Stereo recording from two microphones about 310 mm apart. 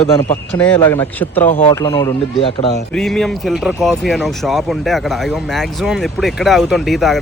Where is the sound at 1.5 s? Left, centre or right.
Left.